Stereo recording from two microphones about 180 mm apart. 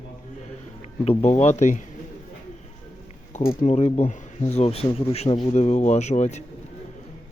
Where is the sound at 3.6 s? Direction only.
40° left (ahead or behind).